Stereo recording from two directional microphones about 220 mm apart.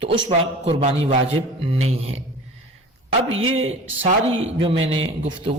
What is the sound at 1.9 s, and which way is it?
Speech, 25° right (ahead or behind).